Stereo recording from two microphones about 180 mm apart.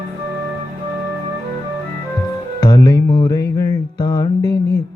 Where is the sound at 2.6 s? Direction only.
20° left (ahead or behind).